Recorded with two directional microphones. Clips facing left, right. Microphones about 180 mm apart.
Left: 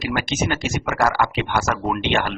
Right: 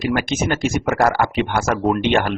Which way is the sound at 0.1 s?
45° right (ahead or behind).